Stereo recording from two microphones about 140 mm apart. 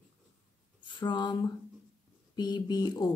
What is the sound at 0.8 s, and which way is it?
Speech, 35° left (ahead or behind).